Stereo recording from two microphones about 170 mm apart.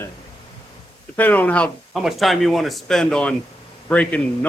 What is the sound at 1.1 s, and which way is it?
Speech, 10° left (ahead or behind).